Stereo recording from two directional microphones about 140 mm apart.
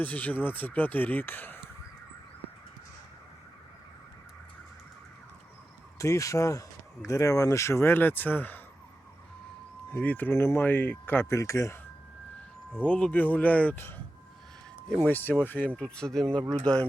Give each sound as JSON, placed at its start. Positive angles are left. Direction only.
{"t": 0.0, "sound": "speech", "side_deg": 10}
{"t": 6.0, "sound": "speech", "side_deg": 20}
{"t": 9.9, "sound": "speech", "side_deg": 10}
{"t": 12.8, "sound": "speech", "side_deg": 10}
{"t": 15.0, "sound": "speech", "side_deg": 15}
{"t": 16.4, "sound": "speech", "side_deg": -30}